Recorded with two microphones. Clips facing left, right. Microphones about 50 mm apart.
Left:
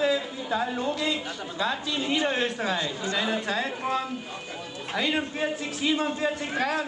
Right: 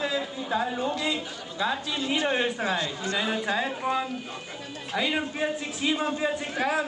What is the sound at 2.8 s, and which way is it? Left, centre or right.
Speech, centre.